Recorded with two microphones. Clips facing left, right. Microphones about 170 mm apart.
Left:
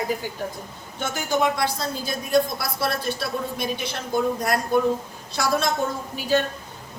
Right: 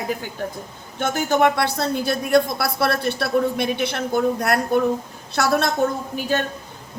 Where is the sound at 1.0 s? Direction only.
55° right (ahead or behind).